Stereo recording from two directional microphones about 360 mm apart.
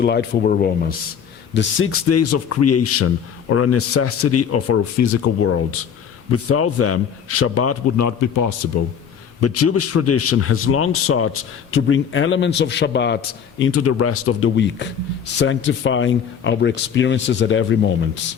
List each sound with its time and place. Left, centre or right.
0.0 s speech: left
1.5 s a man's voice: left
9.4 s a man's voice: left
13.6 s a man's voice: left